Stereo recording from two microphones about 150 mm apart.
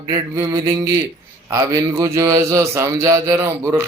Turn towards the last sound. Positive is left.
turn(degrees=-20)  # may be behind; listen again after turning